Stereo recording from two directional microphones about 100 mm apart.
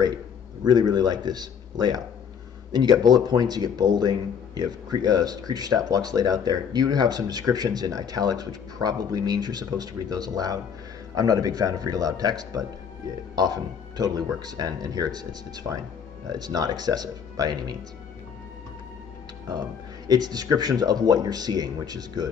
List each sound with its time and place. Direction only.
0.7 s a man's voice: 45° right (ahead or behind)
20.1 s a man's voice: 45° right (ahead or behind)